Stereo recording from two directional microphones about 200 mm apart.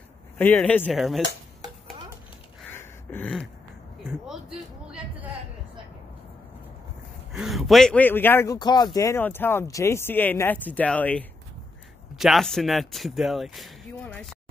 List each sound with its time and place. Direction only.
0.4 s speech: 10° left (ahead or behind)
2.7 s a sound: 10° left (ahead or behind)
7.3 s speech: centre (ahead or behind)